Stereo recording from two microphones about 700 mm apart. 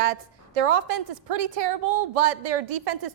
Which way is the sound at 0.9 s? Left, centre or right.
Right.